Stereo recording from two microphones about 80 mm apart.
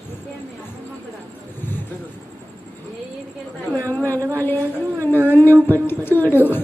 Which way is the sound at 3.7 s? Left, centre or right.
Left.